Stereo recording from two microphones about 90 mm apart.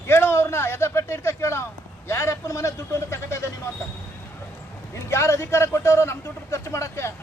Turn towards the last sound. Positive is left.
turn(degrees=30)  # may be behind; listen again after turning